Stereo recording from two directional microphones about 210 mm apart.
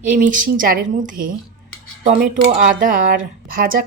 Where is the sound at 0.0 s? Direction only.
40° right (ahead or behind).